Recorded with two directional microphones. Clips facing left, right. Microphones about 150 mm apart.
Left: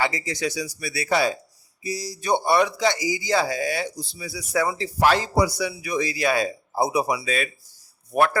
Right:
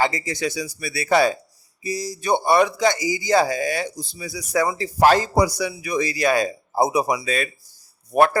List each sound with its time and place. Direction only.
0.0 s a man's voice: 50° right (ahead or behind)